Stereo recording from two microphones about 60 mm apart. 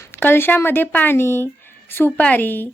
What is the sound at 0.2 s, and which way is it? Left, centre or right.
Speech, left.